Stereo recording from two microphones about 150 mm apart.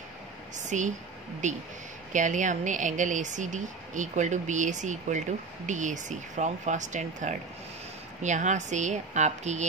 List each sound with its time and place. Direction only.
0.6 s speech: 55° right (ahead or behind)